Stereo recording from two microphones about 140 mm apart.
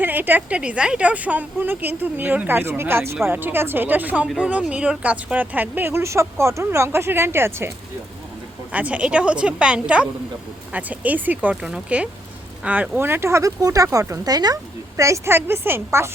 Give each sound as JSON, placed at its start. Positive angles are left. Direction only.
{"t": 0.0, "sound": "a woman's voice", "side_deg": -15}
{"t": 8.7, "sound": "a woman's voice", "side_deg": -10}